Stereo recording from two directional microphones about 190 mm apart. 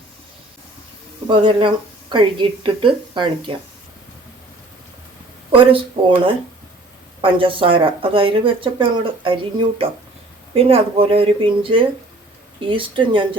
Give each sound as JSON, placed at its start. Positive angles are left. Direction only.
{"t": 1.3, "sound": "speech", "side_deg": -25}
{"t": 5.5, "sound": "speech", "side_deg": -30}